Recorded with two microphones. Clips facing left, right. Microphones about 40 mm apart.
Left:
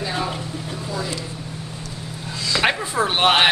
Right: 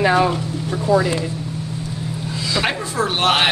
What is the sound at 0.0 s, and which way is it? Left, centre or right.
Speech, right.